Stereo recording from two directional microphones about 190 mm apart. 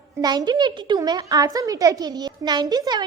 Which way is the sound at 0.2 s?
20° right (ahead or behind).